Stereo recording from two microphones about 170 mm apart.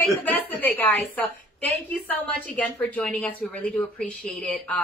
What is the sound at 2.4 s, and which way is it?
Speech, 10° left (ahead or behind).